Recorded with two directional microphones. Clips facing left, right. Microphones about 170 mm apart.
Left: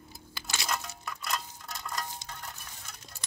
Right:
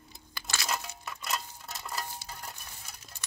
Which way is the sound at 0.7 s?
5° right (ahead or behind).